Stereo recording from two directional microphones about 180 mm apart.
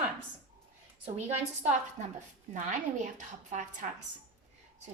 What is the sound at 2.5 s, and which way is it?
A woman's voice, 45° right (ahead or behind).